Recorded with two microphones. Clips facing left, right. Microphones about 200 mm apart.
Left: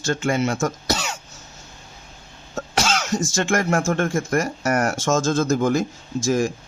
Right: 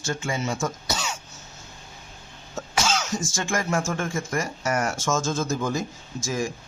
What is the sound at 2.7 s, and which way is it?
Speech, 65° left (ahead or behind).